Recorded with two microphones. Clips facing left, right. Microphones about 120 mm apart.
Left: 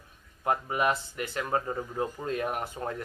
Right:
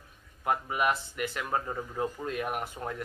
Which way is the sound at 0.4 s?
30° left (ahead or behind).